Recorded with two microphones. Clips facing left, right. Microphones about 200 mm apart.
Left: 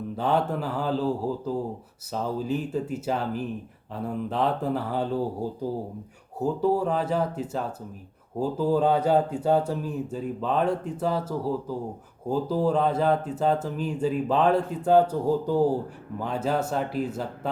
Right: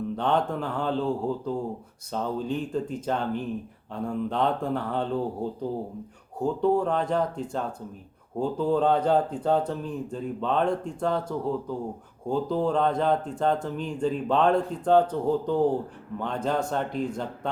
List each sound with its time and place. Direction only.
0.2 s speech: 5° left (ahead or behind)